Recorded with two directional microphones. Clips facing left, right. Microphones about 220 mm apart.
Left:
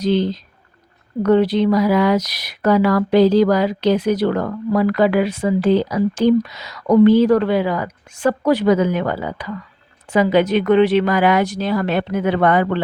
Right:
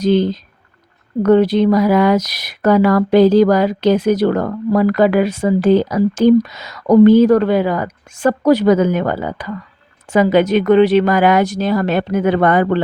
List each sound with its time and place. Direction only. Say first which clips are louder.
0.0 s speech: right 4 dB; 45° right (ahead or behind)